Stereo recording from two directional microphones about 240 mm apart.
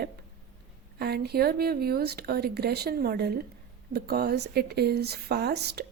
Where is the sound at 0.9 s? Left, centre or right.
Right.